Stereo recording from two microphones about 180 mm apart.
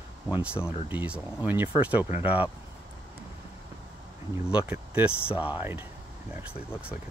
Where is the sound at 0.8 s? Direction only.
10° right (ahead or behind).